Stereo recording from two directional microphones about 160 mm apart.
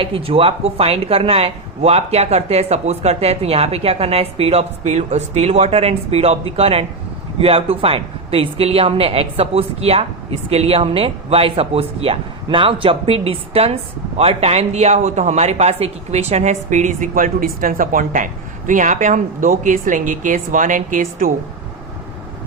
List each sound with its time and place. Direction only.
0.0 s speech: 35° right (ahead or behind); by 21.2 s 55° right (ahead or behind)